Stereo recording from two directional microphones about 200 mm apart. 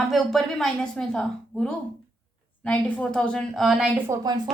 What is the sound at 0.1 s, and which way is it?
A woman's voice, centre (ahead or behind).